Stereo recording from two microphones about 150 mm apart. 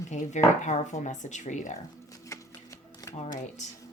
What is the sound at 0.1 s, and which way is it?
Speech, 50° left (ahead or behind).